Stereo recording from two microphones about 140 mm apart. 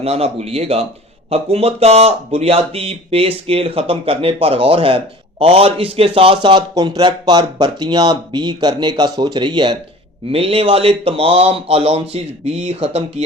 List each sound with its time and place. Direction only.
0.0 s speech: 45° right (ahead or behind)
10.2 s speech: 45° right (ahead or behind)